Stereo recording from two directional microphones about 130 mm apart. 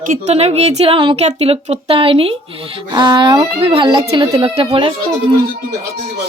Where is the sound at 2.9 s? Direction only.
35° right (ahead or behind).